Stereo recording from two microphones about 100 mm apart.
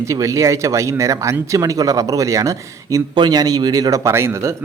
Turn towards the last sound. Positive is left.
turn(degrees=-25)  # may be behind; listen again after turning